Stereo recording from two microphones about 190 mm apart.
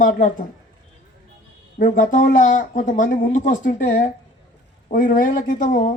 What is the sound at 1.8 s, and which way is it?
Speech, 45° left (ahead or behind).